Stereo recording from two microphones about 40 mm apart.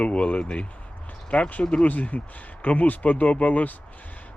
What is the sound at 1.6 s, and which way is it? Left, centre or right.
Speech, left.